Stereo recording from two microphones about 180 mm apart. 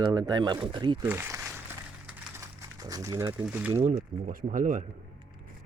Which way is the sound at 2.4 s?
20° right (ahead or behind).